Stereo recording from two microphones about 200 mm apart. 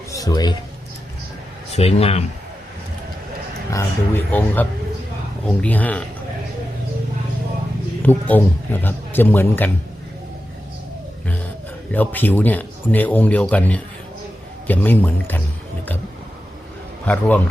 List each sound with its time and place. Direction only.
0.1 s music: 20° left (ahead or behind)
1.7 s speech: 30° left (ahead or behind)
3.7 s speech: 10° left (ahead or behind)
8.0 s speech: 10° left (ahead or behind)
11.9 s speech: 10° left (ahead or behind)
17.1 s speech: 5° left (ahead or behind)